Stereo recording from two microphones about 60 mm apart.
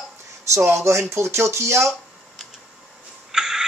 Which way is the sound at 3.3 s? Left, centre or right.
Centre.